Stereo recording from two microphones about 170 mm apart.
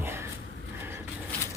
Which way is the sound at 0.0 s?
15° right (ahead or behind).